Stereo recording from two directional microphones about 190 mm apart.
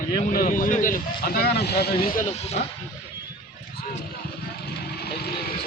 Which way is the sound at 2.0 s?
50° left (ahead or behind).